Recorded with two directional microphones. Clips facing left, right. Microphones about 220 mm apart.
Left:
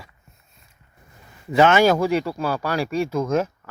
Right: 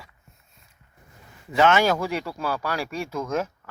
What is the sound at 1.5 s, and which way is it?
Speech, 5° left (ahead or behind).